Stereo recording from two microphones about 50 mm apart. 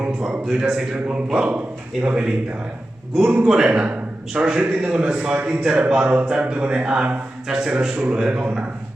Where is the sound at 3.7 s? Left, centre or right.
Right.